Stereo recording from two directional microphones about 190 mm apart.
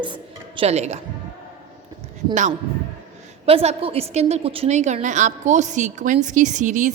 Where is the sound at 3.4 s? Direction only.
30° right (ahead or behind).